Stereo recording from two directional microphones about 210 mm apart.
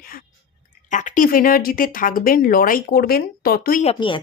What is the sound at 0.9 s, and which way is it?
Speech, 35° left (ahead or behind).